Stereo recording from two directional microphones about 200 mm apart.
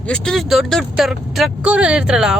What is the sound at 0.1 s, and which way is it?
Speech, centre (ahead or behind).